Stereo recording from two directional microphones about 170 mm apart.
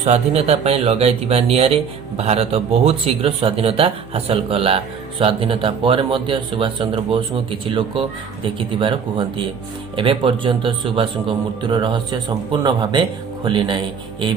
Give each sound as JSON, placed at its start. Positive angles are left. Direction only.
{"t": 0.0, "sound": "a man's voice", "side_deg": -40}